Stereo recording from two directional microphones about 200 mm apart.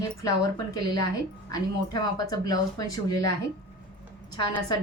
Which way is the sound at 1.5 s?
20° left (ahead or behind).